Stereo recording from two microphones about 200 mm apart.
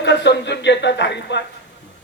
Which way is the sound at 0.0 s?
60° left (ahead or behind).